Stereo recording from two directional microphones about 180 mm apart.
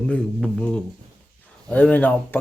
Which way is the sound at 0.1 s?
5° left (ahead or behind).